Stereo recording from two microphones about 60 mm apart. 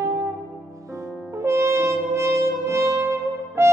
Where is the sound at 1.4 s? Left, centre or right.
Right.